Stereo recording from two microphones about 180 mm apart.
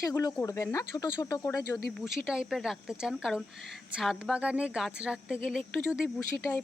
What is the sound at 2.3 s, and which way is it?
Speech, 5° right (ahead or behind).